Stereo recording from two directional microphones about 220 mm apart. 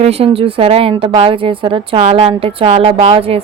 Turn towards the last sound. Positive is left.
turn(degrees=-25)  # may be behind; listen again after turning